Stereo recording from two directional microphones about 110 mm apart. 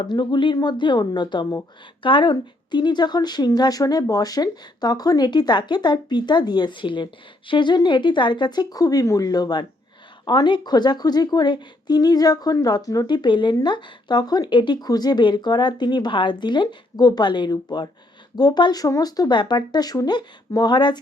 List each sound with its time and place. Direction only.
0.0 s a woman's voice: 45° left (ahead or behind)